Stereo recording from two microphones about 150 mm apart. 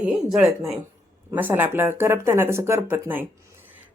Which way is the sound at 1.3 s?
15° right (ahead or behind).